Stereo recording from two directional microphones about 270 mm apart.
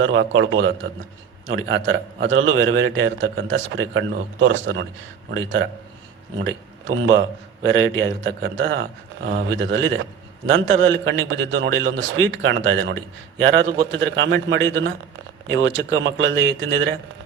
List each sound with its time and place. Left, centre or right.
0.0 s a man's voice: right